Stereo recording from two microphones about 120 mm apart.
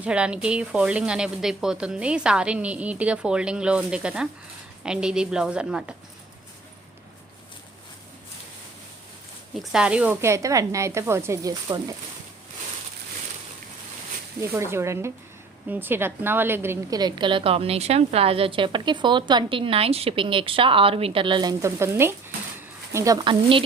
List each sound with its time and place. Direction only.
0.0 s a woman's voice: 10° right (ahead or behind)
9.6 s a woman's voice: 5° right (ahead or behind)
10.2 s speech: 25° right (ahead or behind)
14.4 s a woman's voice: 20° right (ahead or behind)
16.9 s a woman's voice: 35° right (ahead or behind)
21.6 s speech: 20° right (ahead or behind)
23.2 s a woman's voice: 45° right (ahead or behind)